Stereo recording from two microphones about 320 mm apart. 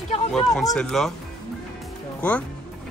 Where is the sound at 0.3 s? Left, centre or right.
Centre.